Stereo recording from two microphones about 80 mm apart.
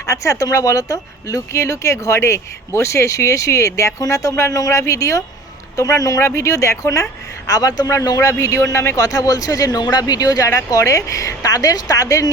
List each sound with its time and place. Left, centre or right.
0.0 s speech: left